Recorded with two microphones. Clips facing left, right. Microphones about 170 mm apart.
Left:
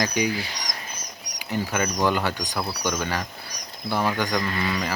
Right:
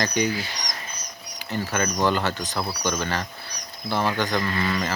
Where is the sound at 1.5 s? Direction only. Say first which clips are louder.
Even; 10° left (ahead or behind).